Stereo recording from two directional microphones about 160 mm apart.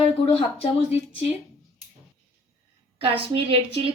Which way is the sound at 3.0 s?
35° right (ahead or behind).